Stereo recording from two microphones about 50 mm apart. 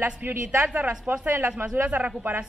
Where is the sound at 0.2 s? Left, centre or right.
Right.